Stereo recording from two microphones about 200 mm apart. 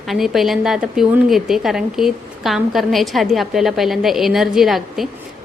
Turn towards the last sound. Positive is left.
turn(degrees=0)  # may be behind; listen again after turning